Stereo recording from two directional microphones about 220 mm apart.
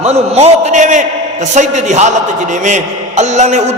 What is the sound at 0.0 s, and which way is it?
A man's voice, 30° right (ahead or behind).